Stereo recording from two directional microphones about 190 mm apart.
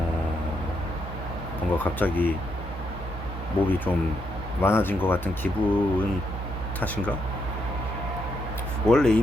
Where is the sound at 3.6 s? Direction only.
10° left (ahead or behind).